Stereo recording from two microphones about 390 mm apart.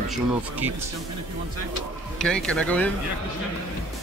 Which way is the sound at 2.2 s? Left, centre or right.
Centre.